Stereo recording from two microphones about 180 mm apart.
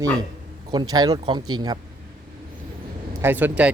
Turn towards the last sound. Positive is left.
turn(degrees=-10)  # may be behind; listen again after turning